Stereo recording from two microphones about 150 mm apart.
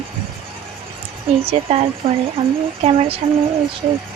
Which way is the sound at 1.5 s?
45° right (ahead or behind).